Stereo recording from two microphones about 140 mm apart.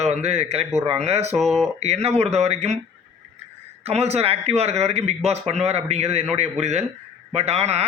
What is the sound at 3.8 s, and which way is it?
A man's voice, 50° right (ahead or behind).